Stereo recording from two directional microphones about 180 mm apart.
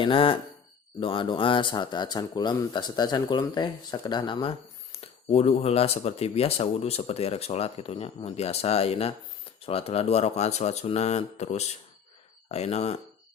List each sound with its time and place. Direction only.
0.0 s speech: 30° left (ahead or behind)